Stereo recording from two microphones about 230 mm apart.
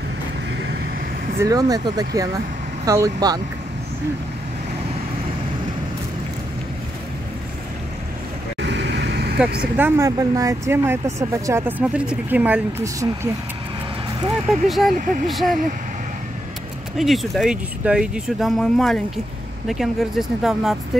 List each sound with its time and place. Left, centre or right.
1.4 s speech: centre
8.5 s vehicle: right
9.8 s speech: centre
14.5 s speech: centre
16.9 s speech: centre